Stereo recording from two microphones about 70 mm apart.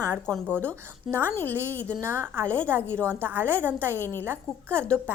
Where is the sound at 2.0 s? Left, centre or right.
Right.